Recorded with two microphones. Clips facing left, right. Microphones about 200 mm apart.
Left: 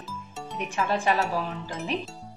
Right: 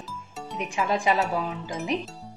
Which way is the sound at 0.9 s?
15° right (ahead or behind).